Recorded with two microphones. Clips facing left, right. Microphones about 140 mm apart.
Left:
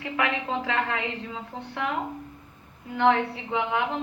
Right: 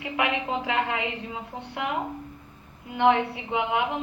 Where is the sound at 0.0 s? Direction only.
15° right (ahead or behind).